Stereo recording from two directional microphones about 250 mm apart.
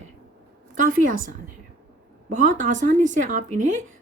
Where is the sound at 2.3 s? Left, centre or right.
Right.